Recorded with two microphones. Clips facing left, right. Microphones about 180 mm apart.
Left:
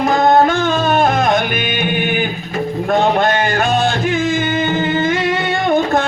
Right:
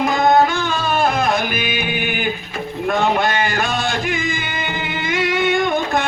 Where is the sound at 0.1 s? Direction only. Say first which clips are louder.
Left 4 dB; 50° left (ahead or behind).